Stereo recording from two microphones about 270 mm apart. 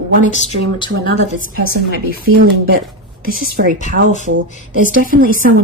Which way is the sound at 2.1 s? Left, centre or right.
Right.